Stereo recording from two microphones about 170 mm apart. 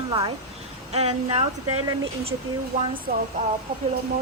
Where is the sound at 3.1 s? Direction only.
60° right (ahead or behind).